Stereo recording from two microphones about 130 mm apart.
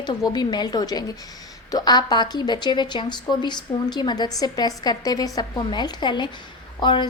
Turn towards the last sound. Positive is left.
turn(degrees=35)  # may be behind; listen again after turning